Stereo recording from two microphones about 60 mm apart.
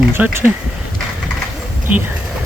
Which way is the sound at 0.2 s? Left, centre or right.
Right.